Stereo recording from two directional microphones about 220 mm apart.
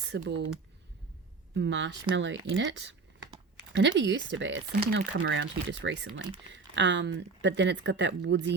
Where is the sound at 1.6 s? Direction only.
55° right (ahead or behind).